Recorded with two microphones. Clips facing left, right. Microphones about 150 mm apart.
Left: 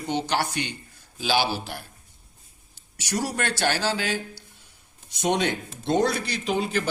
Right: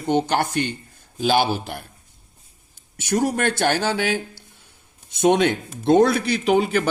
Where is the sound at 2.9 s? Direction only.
55° right (ahead or behind).